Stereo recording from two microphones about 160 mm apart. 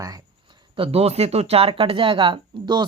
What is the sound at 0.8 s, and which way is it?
Speech, 40° right (ahead or behind).